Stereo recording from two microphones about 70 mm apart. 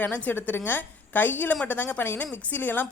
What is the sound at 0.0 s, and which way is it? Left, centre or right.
A woman's voice, left.